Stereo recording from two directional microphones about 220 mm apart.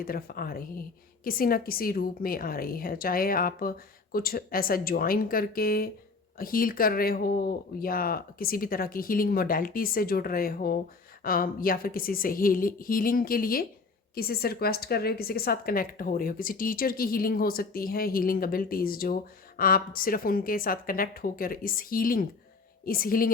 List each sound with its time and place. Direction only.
0.0 s a woman's voice: 40° left (ahead or behind)